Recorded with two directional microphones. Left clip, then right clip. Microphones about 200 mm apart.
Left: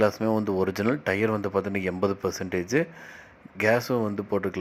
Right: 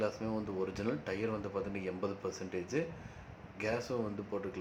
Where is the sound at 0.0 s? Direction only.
40° left (ahead or behind).